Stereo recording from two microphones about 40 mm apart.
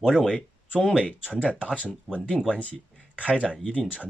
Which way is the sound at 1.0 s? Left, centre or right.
Left.